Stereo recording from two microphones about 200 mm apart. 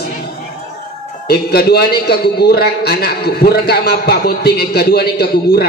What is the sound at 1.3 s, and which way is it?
A man's voice, 50° left (ahead or behind).